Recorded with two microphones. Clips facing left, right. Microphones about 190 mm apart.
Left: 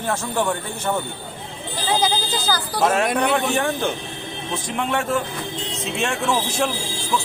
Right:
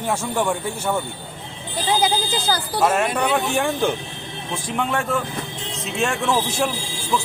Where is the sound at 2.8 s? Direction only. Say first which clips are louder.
Left 1 dB; 5° right (ahead or behind).